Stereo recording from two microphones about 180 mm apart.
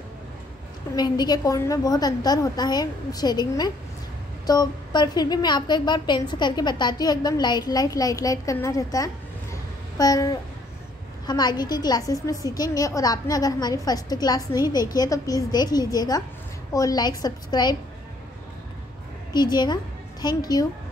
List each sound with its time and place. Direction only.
0.9 s a woman's voice: 25° left (ahead or behind)
19.3 s a woman's voice: 25° left (ahead or behind)